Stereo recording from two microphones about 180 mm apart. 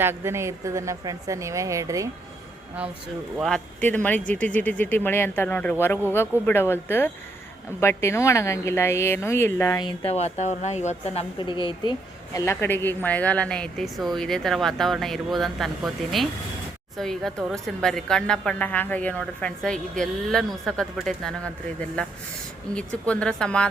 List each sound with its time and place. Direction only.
0.0 s a woman's voice: 15° right (ahead or behind)
3.3 s a woman's voice: centre (ahead or behind)